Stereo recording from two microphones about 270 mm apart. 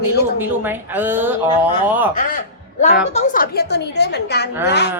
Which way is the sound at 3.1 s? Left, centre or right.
Left.